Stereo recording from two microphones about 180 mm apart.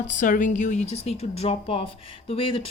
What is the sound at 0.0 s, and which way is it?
Speech, 45° left (ahead or behind).